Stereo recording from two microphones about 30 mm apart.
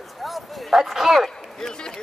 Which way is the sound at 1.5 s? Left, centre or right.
Left.